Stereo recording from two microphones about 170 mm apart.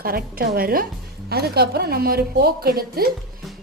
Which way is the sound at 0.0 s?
60° right (ahead or behind).